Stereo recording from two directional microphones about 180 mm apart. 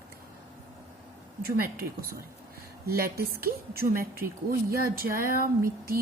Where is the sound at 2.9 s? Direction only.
55° right (ahead or behind).